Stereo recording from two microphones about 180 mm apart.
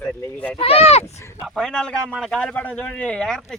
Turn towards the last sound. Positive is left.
turn(degrees=0)  # may be behind; listen again after turning